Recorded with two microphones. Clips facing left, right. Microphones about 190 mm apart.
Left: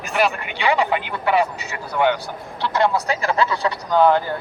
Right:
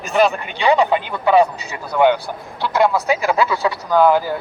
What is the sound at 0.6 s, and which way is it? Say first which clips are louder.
Speech: right 4 dB; 20° right (ahead or behind).